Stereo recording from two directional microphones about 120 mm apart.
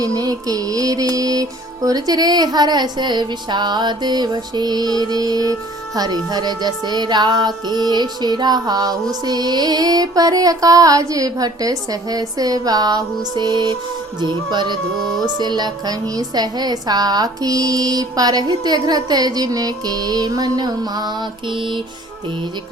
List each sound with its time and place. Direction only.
0.0 s music: 30° right (ahead or behind)